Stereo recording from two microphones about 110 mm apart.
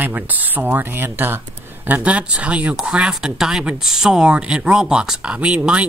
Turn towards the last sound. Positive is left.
turn(degrees=-10)  # may be behind; listen again after turning